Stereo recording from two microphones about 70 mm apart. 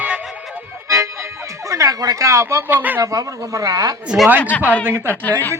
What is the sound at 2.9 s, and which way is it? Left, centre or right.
Speech, right.